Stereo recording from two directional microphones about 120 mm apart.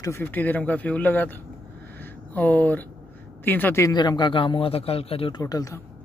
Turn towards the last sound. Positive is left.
turn(degrees=30)  # may be behind; listen again after turning